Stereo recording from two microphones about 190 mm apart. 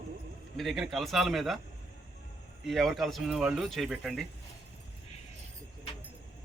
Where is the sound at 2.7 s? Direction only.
Centre (ahead or behind).